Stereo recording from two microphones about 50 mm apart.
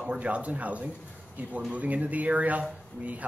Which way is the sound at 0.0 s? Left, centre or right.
Right.